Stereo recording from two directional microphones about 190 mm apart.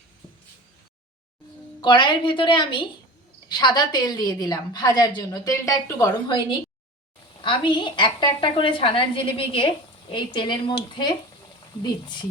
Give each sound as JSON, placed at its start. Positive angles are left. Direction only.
{"t": 1.8, "sound": "a woman's voice", "side_deg": 25}
{"t": 7.4, "sound": "a woman's voice", "side_deg": 25}